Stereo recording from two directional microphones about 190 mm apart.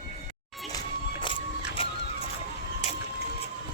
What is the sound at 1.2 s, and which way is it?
Music, 25° left (ahead or behind).